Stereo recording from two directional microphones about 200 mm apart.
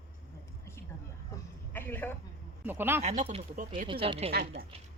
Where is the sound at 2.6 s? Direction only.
10° right (ahead or behind).